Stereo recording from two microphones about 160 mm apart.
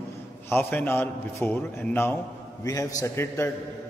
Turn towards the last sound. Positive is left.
turn(degrees=15)  # may be behind; listen again after turning